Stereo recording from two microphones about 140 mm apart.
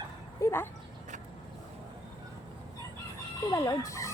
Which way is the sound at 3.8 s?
20° left (ahead or behind).